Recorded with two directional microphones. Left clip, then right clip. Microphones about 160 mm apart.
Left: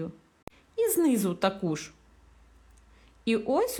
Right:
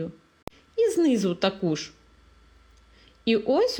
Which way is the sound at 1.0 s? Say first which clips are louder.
Right 3 dB; 10° right (ahead or behind).